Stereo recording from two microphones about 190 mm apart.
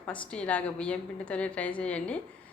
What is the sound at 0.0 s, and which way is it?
A woman's voice, 5° left (ahead or behind).